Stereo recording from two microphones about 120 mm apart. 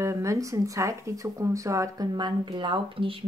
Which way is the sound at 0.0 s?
25° right (ahead or behind).